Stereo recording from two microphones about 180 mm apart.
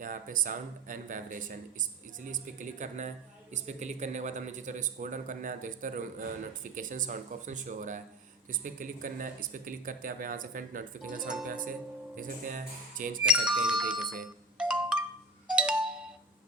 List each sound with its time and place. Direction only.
0.0 s a man's voice: 45° right (ahead or behind)
13.2 s speech: 5° right (ahead or behind)
14.2 s marimba: 5° right (ahead or behind)
15.4 s ringtone: 5° right (ahead or behind)